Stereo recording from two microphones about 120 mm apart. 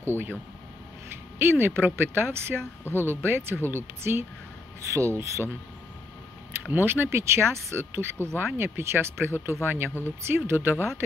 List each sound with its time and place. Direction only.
0.0 s speech: 20° right (ahead or behind)
6.6 s speech: 15° right (ahead or behind)